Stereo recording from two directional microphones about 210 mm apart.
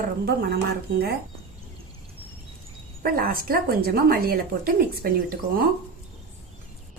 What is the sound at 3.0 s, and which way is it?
A woman's voice, 45° right (ahead or behind).